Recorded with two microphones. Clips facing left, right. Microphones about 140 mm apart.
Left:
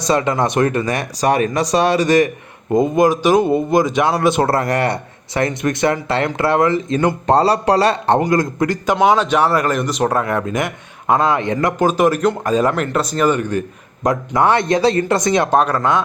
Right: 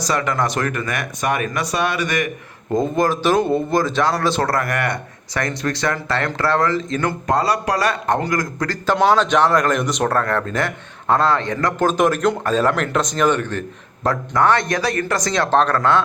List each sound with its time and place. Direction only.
0.1 s speech: 25° left (ahead or behind)
2.8 s speech: 15° left (ahead or behind)
7.3 s speech: 30° left (ahead or behind)
9.0 s speech: 5° left (ahead or behind)
10.1 s speech: 15° left (ahead or behind)